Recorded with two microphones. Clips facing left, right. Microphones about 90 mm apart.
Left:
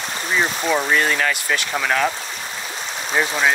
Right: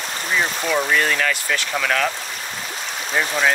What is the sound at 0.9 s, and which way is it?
Speech, 20° left (ahead or behind).